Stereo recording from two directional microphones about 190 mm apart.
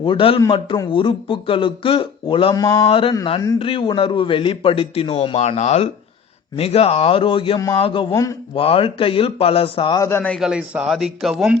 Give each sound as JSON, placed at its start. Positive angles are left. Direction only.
{"t": 0.0, "sound": "a man's voice", "side_deg": 25}
{"t": 8.1, "sound": "a man's voice", "side_deg": 15}
{"t": 8.5, "sound": "a man's voice", "side_deg": 30}